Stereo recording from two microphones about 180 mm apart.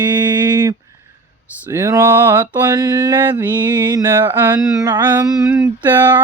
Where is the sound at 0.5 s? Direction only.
20° right (ahead or behind).